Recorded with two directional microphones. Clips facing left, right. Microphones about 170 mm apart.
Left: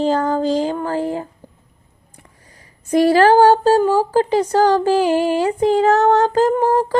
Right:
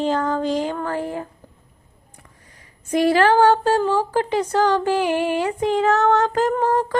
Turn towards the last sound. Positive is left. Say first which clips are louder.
# left 4 dB
turn(degrees=30)  # may be behind; listen again after turning